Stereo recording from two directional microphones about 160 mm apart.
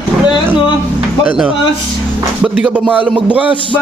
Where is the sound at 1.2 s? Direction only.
10° right (ahead or behind).